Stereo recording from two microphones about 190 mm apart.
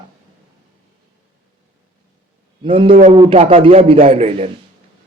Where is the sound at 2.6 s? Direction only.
25° right (ahead or behind).